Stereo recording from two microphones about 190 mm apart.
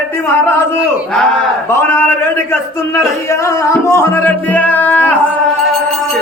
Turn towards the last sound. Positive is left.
turn(degrees=10)  # may be behind; listen again after turning